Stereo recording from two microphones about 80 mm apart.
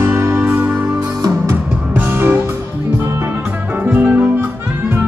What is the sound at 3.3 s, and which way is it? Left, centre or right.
Music, right.